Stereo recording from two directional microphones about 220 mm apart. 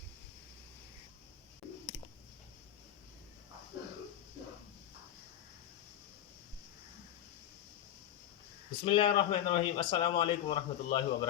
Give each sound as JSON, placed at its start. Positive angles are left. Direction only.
{"t": 8.8, "sound": "a man's voice", "side_deg": 25}